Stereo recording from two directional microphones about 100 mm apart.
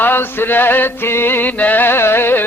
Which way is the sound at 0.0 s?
20° left (ahead or behind).